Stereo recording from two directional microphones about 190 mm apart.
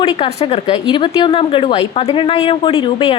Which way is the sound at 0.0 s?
30° left (ahead or behind).